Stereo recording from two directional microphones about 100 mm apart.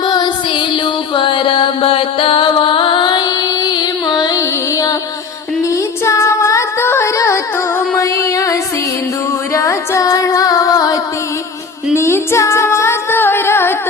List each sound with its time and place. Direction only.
0.0 s music: 50° left (ahead or behind)
11.9 s music: 25° left (ahead or behind)